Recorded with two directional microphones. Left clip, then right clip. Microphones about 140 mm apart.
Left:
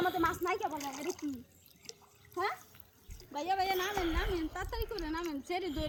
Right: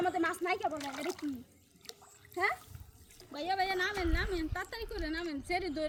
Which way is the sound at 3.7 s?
25° left (ahead or behind).